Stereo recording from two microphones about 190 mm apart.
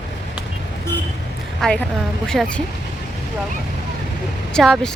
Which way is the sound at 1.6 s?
5° left (ahead or behind).